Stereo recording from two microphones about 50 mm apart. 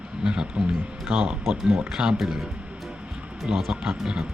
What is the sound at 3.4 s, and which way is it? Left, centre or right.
Speech, centre.